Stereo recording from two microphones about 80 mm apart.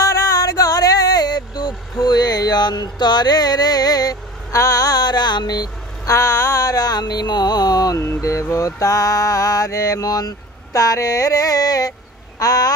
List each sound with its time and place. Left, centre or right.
0.0 s music: left
6.0 s mantra: left
8.0 s mantra: left